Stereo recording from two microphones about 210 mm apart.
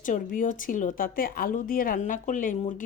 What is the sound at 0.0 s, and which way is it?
Speech, 40° left (ahead or behind).